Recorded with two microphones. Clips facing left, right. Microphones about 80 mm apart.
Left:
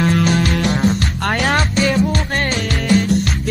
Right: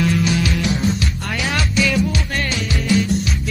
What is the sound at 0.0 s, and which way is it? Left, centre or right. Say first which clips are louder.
Music: left 3 dB; left.